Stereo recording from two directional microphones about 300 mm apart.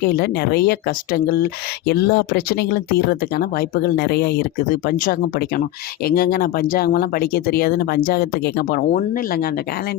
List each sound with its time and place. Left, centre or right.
0.1 s speech: left
6.1 s speech: left